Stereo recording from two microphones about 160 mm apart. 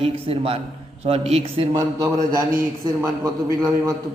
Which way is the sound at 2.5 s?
20° right (ahead or behind).